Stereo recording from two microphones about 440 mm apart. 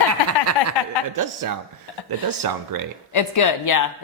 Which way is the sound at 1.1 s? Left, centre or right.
Right.